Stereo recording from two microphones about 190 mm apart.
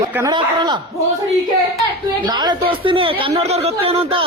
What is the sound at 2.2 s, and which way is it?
Speech, 20° right (ahead or behind).